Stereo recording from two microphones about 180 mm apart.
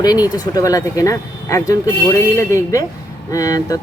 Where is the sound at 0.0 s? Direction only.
20° left (ahead or behind).